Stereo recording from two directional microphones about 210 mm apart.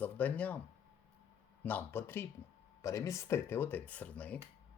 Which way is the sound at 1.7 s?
10° left (ahead or behind).